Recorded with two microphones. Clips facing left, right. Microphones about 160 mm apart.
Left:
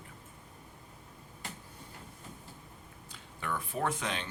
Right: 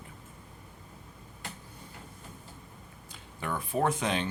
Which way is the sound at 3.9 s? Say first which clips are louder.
Right 6 dB; 20° right (ahead or behind).